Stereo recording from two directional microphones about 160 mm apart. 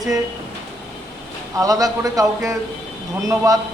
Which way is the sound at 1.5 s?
20° right (ahead or behind).